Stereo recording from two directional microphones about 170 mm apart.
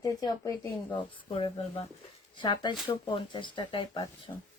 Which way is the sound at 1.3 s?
30° left (ahead or behind).